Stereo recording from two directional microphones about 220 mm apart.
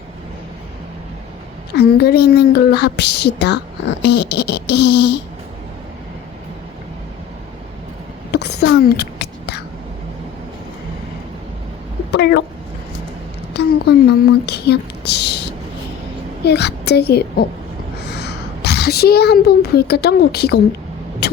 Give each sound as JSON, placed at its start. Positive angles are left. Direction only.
{"t": 1.7, "sound": "a woman's voice", "side_deg": 50}
{"t": 8.3, "sound": "a sound", "side_deg": 50}
{"t": 12.1, "sound": "a woman's voice", "side_deg": 50}
{"t": 13.6, "sound": "a woman's voice", "side_deg": 50}
{"t": 16.5, "sound": "a woman's voice", "side_deg": 50}